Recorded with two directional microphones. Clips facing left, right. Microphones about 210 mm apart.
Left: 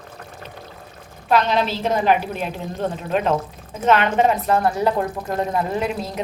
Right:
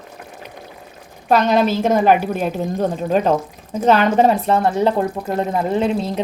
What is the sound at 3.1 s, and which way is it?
A woman's voice, 35° right (ahead or behind).